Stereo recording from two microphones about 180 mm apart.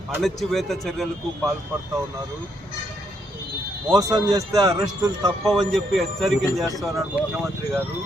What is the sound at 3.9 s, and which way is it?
Speech, 20° right (ahead or behind).